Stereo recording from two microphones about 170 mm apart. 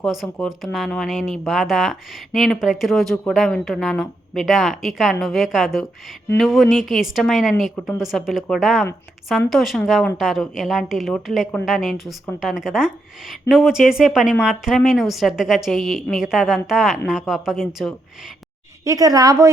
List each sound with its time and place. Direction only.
0.0 s speech: centre (ahead or behind)
18.9 s a woman's voice: 20° right (ahead or behind)